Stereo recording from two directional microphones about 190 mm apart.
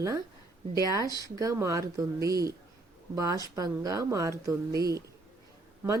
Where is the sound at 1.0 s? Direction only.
20° left (ahead or behind).